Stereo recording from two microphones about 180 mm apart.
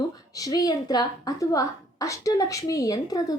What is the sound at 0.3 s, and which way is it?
A woman's voice, 20° left (ahead or behind).